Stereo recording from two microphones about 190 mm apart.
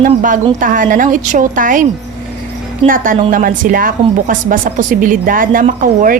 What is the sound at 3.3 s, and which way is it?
A woman's voice, 45° right (ahead or behind).